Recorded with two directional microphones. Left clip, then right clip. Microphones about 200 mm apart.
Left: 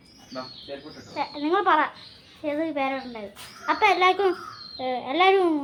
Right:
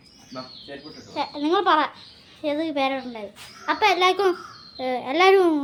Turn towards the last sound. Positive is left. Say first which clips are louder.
# right 3 dB
turn(degrees=-30)  # may be behind; listen again after turning